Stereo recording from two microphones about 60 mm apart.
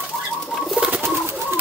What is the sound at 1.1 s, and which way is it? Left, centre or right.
Bird, right.